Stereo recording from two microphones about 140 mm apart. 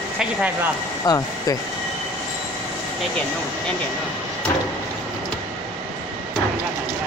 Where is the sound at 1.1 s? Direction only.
30° left (ahead or behind).